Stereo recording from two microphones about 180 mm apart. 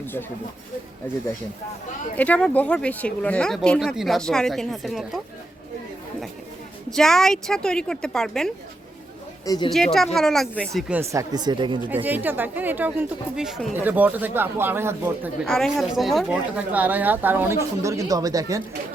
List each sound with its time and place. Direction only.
2.1 s speech: 10° left (ahead or behind)
6.9 s speech: 5° left (ahead or behind)
9.7 s speech: centre (ahead or behind)
11.1 s speech: 20° right (ahead or behind)
12.0 s speech: 10° right (ahead or behind)
15.4 s speech: centre (ahead or behind); by 18.6 s 20° right (ahead or behind)